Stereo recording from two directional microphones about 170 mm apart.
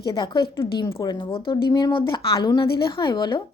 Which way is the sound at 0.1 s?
25° left (ahead or behind).